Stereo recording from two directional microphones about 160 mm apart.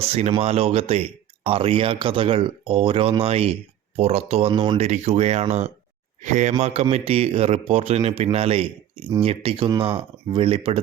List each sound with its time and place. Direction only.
0.0 s speech: 40° right (ahead or behind)
4.9 s speech: 45° right (ahead or behind)